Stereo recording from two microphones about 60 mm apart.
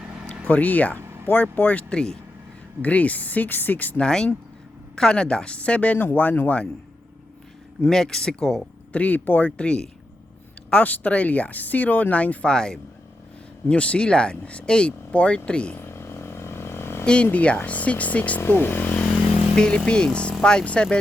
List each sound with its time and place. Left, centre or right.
0.4 s speech: left
1.0 s vehicle: right
1.3 s speech: left
4.0 s speech: centre; by 6.6 s left
7.9 s speech: centre
8.9 s speech: left
9.6 s speech: centre
15.8 s vehicle: left
17.3 s speech: left